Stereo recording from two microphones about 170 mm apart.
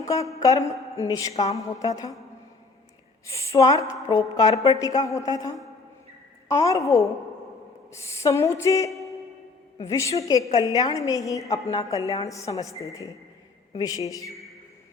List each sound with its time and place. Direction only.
0.0 s a woman's voice: 20° left (ahead or behind)
3.2 s a woman's voice: 20° left (ahead or behind)